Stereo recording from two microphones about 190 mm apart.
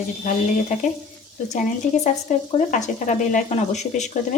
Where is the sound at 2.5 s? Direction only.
40° left (ahead or behind).